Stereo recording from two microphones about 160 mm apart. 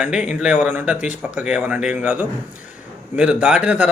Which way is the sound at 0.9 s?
50° left (ahead or behind).